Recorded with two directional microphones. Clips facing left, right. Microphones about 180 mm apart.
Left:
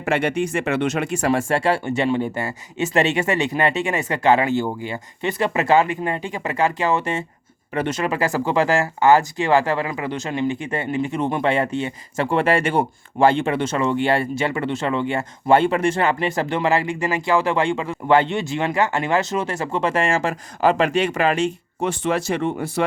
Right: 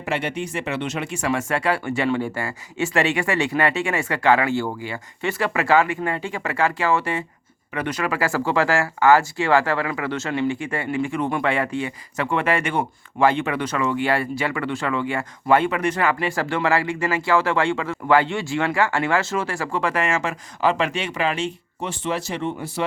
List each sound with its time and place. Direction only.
0.0 s speech: 50° left (ahead or behind)
1.3 s speech: 30° left (ahead or behind); by 22.6 s 55° left (ahead or behind)